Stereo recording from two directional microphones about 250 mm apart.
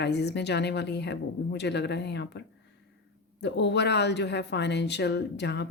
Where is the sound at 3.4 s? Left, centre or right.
Left.